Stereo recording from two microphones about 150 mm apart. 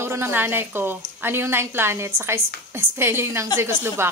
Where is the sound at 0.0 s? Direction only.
15° right (ahead or behind).